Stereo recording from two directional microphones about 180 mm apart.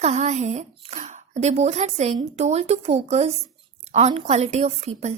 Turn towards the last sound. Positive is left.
turn(degrees=-35)  # may be behind; listen again after turning